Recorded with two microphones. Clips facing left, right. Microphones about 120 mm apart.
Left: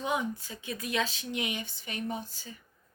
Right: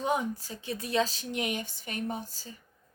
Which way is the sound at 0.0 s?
40° right (ahead or behind).